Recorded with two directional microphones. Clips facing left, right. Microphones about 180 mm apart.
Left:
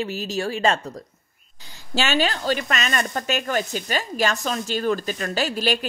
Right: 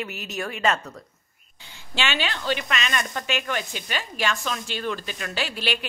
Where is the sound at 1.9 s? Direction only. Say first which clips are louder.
Left 5 dB; 40° left (ahead or behind).